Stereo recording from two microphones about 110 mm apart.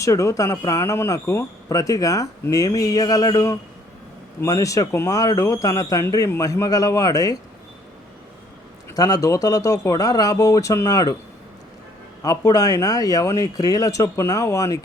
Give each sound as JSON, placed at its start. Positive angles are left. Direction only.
{"t": 0.0, "sound": "speech", "side_deg": 30}
{"t": 9.0, "sound": "speech", "side_deg": 35}
{"t": 12.2, "sound": "speech", "side_deg": 35}